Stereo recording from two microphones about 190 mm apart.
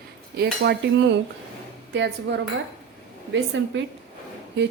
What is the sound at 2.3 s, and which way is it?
Speech, 75° right (ahead or behind).